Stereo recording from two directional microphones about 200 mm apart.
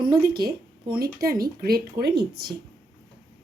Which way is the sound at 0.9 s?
50° right (ahead or behind).